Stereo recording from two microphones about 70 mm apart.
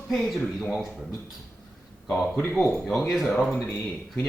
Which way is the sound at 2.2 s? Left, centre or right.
Left.